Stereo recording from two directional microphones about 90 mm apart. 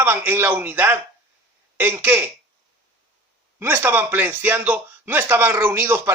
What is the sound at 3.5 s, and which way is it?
Speech, 25° right (ahead or behind).